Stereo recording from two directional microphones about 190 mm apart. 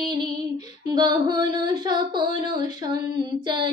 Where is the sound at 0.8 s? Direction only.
20° right (ahead or behind).